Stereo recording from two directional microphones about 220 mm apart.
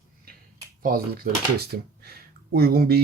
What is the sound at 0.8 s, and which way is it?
Speech, 45° right (ahead or behind).